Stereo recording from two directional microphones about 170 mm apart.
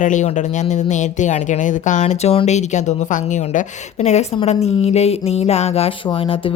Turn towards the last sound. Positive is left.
turn(degrees=30)  # may be behind; listen again after turning